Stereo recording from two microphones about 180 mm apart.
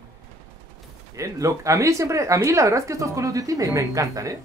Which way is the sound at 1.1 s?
15° right (ahead or behind).